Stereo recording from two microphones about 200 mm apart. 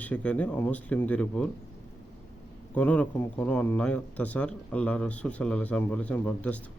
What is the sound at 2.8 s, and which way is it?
Speech, 10° left (ahead or behind).